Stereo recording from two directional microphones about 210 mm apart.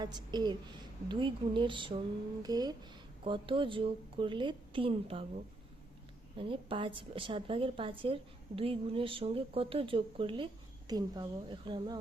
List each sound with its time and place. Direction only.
0.0 s a woman's voice: 20° right (ahead or behind)
6.3 s a woman's voice: 25° right (ahead or behind)